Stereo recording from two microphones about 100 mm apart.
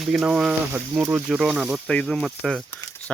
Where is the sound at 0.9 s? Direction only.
20° right (ahead or behind).